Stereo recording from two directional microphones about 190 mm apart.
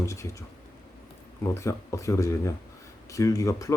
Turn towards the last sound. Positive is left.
turn(degrees=15)  # may be behind; listen again after turning